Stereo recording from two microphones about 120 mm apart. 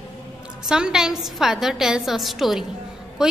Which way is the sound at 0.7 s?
5° right (ahead or behind).